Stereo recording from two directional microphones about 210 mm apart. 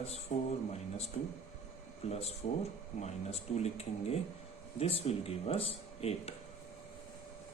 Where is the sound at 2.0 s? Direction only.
30° left (ahead or behind).